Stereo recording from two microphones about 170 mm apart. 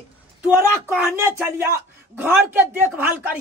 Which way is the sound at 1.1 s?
15° right (ahead or behind).